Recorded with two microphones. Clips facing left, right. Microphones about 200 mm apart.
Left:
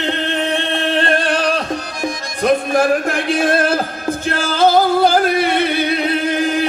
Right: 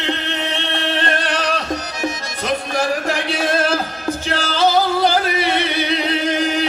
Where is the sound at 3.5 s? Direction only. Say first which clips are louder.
Left 3 dB; 55° left (ahead or behind).